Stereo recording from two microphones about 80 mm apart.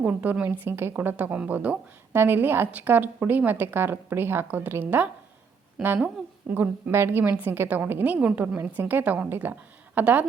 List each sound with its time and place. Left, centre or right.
0.0 s a woman's voice: right